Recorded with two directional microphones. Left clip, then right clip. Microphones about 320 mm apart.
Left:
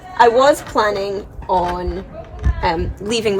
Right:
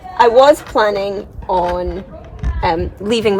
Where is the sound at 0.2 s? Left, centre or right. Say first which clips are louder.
Right 3 dB; centre.